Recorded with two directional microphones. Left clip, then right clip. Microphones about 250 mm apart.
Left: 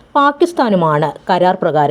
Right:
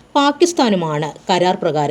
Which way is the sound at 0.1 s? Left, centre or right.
Left.